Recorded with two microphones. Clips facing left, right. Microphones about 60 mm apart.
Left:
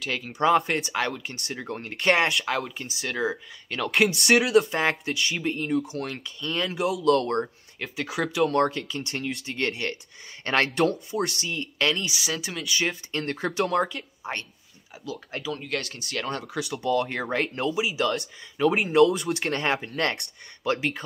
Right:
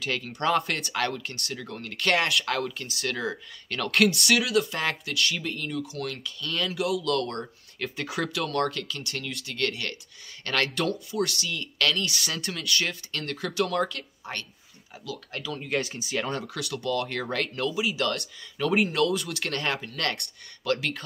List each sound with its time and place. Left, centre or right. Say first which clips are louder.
0.0 s speech: even; centre
0.3 s speech: left 5 dB; centre
2.3 s speech: even; centre
4.4 s speech: left 5 dB; left
5.1 s speech: even; centre
5.4 s speech: left 6 dB; left
7.8 s speech: left 1 dB; centre
8.5 s speech: left 4 dB; left
13.1 s speech: left 4 dB; left
15.7 s speech: right 2 dB; centre
16.5 s speech: left 6 dB; centre
19.1 s speech: left 3 dB; left